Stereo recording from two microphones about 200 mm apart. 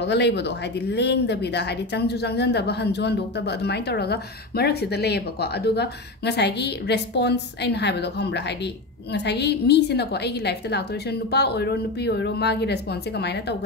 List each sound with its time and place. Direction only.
0.0 s speech: 60° left (ahead or behind)